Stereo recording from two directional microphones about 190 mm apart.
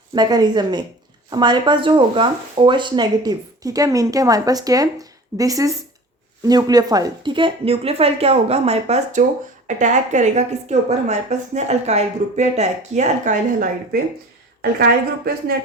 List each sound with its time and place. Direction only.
0.1 s a woman's voice: 20° right (ahead or behind); by 14.0 s 45° right (ahead or behind)
14.6 s a woman's voice: 55° right (ahead or behind)